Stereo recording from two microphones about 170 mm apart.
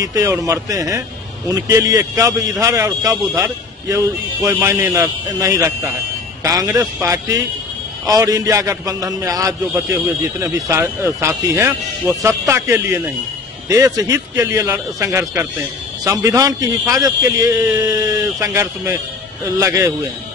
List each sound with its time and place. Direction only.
0.0 s a man's voice: 20° right (ahead or behind)